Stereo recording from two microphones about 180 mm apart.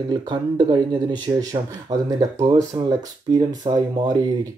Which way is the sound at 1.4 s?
20° right (ahead or behind).